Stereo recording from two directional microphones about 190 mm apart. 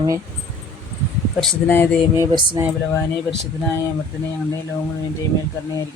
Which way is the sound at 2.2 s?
25° right (ahead or behind).